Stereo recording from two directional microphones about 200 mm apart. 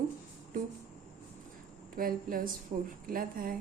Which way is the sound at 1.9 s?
45° right (ahead or behind).